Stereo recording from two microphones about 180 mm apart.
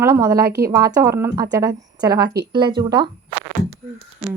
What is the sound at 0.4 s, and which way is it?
Speech, 60° right (ahead or behind).